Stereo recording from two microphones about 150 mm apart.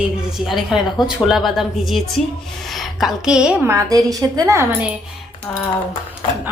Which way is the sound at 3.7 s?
20° right (ahead or behind).